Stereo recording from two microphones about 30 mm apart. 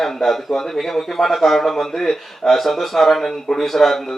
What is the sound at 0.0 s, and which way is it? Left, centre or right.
Speech, centre.